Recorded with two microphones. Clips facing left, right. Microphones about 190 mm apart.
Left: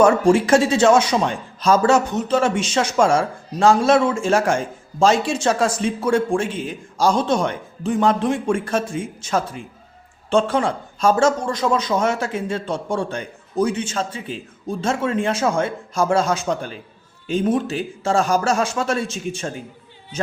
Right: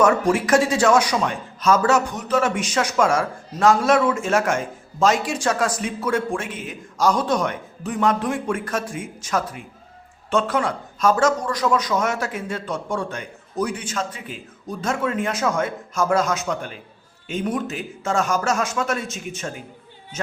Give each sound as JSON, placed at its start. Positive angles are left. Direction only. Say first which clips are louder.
{"t": 0.0, "sound": "a man's voice", "louder": "left 4 dB", "side_deg": 30}